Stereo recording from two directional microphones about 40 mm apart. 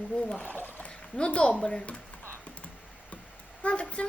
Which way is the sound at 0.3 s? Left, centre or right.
Left.